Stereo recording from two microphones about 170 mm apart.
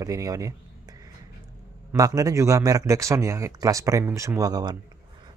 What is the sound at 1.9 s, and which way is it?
Speech, 20° right (ahead or behind).